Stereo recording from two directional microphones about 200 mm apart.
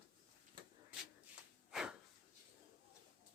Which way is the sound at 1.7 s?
5° right (ahead or behind).